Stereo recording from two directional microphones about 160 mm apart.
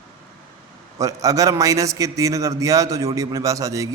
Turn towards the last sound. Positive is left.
turn(degrees=-20)  # may be behind; listen again after turning